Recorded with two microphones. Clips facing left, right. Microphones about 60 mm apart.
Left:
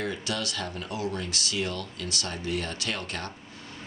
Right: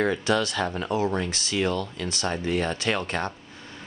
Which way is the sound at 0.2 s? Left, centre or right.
Right.